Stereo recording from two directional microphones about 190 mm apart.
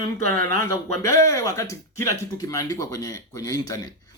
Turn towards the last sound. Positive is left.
turn(degrees=20)  # may be behind; listen again after turning